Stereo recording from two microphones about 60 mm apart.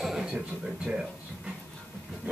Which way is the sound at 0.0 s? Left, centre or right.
Centre.